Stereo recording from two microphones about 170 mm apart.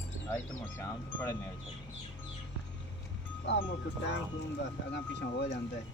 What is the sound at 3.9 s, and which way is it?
Speech, 90° left.